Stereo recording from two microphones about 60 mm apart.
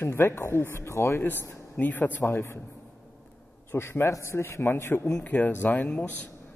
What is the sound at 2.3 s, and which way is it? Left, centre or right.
Speech, left.